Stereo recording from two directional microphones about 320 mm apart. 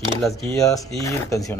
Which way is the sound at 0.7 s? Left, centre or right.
Centre.